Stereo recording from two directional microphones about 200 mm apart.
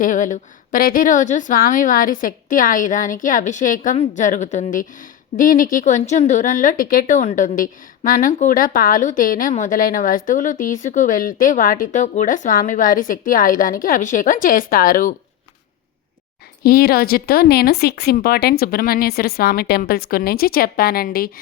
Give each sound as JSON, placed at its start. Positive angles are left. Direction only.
{"t": 0.0, "sound": "a woman's voice", "side_deg": 40}
{"t": 16.6, "sound": "speech", "side_deg": 50}